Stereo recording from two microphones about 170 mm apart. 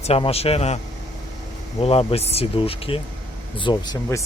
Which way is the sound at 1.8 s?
35° left (ahead or behind).